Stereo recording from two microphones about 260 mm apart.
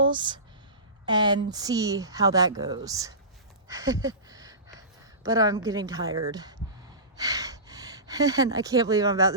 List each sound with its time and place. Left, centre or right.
0.0 s speech: centre
3.7 s a sound: centre
5.2 s speech: centre